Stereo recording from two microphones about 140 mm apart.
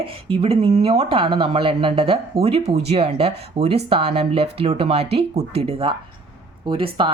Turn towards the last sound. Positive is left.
turn(degrees=-35)  # may be behind; listen again after turning